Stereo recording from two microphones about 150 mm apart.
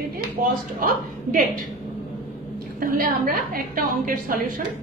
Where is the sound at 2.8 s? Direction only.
70° right (ahead or behind).